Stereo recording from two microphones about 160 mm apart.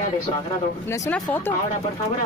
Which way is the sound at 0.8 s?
20° left (ahead or behind).